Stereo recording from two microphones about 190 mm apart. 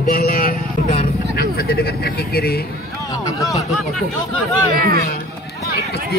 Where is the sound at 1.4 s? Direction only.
55° left (ahead or behind).